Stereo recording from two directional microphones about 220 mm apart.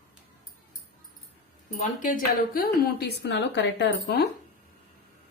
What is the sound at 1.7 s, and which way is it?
A woman's voice, 35° left (ahead or behind).